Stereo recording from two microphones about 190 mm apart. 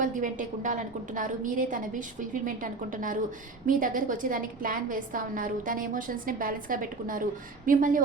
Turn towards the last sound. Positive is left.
turn(degrees=-45)  # may be behind; listen again after turning